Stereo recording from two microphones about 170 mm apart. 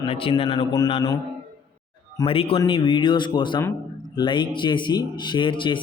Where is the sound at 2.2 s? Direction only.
35° left (ahead or behind).